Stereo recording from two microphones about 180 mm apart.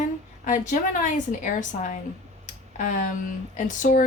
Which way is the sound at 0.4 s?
45° left (ahead or behind).